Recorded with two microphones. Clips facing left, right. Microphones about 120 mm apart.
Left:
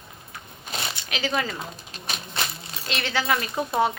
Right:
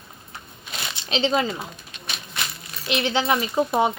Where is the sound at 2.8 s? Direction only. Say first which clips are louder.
Right 4 dB; 20° right (ahead or behind).